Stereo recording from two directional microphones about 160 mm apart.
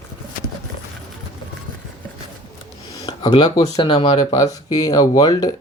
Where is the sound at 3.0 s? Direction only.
25° left (ahead or behind).